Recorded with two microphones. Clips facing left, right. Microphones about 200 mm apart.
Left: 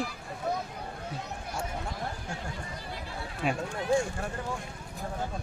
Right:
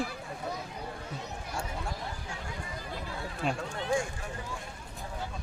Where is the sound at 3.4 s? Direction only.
5° left (ahead or behind).